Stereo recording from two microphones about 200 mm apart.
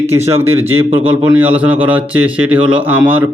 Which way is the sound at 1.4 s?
10° right (ahead or behind).